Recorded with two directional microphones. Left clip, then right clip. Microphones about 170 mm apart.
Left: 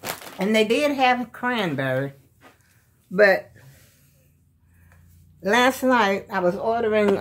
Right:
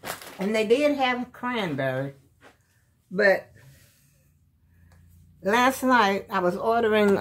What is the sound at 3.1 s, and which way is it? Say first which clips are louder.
Speech: left 4 dB; 25° left (ahead or behind).